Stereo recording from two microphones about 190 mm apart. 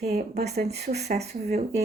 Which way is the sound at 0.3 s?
55° right (ahead or behind).